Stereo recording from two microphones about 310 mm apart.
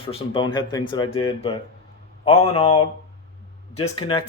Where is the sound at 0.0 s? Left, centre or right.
Centre.